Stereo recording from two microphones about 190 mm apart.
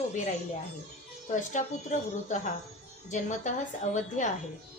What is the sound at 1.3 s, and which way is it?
A woman's voice, 40° left (ahead or behind).